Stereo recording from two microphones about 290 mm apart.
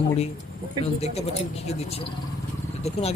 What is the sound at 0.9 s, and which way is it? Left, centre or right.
Speech, left.